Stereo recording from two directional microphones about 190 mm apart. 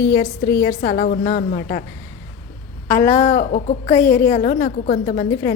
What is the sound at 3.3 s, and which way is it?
A woman's voice, 45° left (ahead or behind).